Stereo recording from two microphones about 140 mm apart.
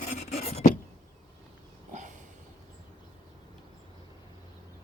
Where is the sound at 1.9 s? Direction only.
60° right (ahead or behind).